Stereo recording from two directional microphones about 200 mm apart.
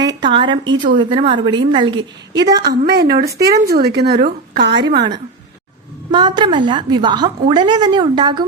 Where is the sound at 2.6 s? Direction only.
55° right (ahead or behind).